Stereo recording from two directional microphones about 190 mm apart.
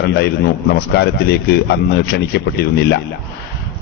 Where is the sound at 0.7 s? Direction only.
60° left (ahead or behind).